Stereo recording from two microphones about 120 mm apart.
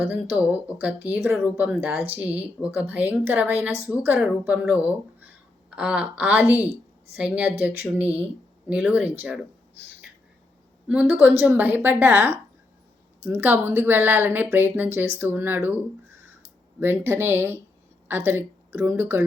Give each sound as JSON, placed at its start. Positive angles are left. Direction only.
{"t": 0.0, "sound": "speech", "side_deg": -10}
{"t": 4.2, "sound": "speech", "side_deg": -5}
{"t": 10.8, "sound": "a woman's voice", "side_deg": -15}